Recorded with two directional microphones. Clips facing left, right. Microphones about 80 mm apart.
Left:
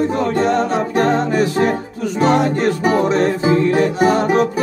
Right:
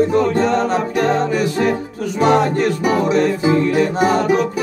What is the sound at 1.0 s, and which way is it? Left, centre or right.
A capella, left.